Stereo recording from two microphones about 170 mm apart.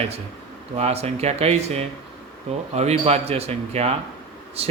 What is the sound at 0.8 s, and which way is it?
Speech, 40° right (ahead or behind).